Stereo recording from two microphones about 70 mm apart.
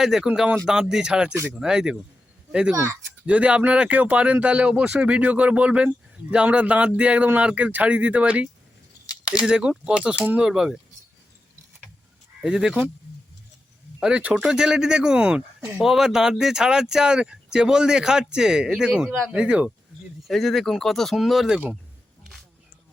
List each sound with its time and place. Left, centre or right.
0.0 s speech: centre
12.5 s speech: centre
14.0 s speech: centre
20.2 s speech: centre